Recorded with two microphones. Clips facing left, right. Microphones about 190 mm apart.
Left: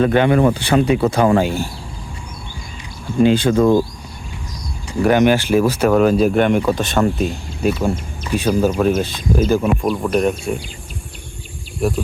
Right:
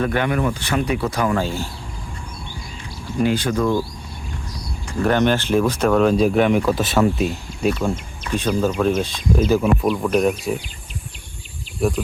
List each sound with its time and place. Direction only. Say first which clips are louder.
0.0 s speech: left 7 dB; 25° left (ahead or behind)
1.5 s speech: left 4 dB; 15° left (ahead or behind)
3.2 s speech: left 6 dB; 25° left (ahead or behind)
4.9 s speech: left 4 dB; 10° left (ahead or behind)
11.8 s speech: left 1 dB; centre (ahead or behind)